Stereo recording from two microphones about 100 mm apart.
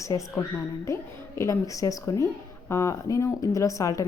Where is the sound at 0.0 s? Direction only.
30° left (ahead or behind).